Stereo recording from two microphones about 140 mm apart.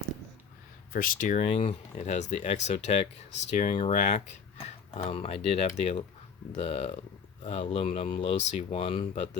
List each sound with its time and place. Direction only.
0.9 s speech: 80° left; by 4.4 s 55° left (ahead or behind)
5.0 s speech: 45° left (ahead or behind)
8.1 s speech: 35° left (ahead or behind)
8.4 s speech: 50° left (ahead or behind)